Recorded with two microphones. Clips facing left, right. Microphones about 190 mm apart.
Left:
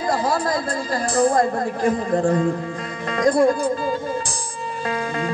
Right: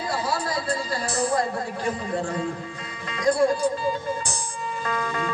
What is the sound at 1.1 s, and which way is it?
Speech, 50° left (ahead or behind).